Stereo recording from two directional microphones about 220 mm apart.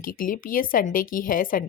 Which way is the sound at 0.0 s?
40° left (ahead or behind).